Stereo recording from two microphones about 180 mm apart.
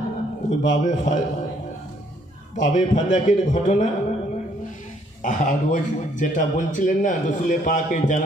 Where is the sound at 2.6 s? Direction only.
45° left (ahead or behind).